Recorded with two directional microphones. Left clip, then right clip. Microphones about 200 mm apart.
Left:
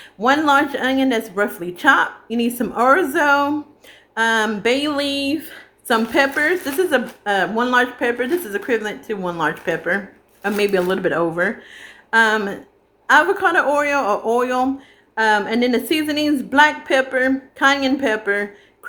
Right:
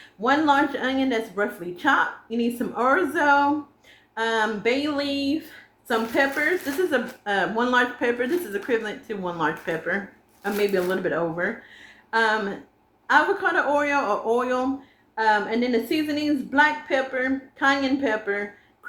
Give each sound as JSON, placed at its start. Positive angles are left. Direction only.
{"t": 0.2, "sound": "a woman's voice", "side_deg": 45}
{"t": 6.9, "sound": "a woman's voice", "side_deg": 35}